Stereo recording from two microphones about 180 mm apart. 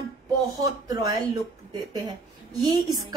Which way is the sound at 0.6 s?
20° right (ahead or behind).